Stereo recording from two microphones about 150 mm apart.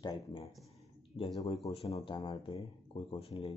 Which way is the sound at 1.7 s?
45° left (ahead or behind).